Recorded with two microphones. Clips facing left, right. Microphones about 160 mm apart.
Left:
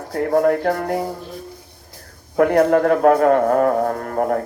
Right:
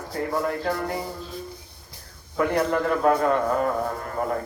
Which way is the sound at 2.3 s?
65° left (ahead or behind).